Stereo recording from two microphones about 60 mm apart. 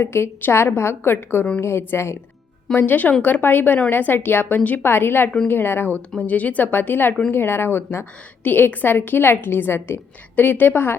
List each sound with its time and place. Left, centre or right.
0.0 s a woman's voice: left
2.7 s a woman's voice: left
4.9 s a woman's voice: left
6.2 s a woman's voice: left
10.3 s a woman's voice: left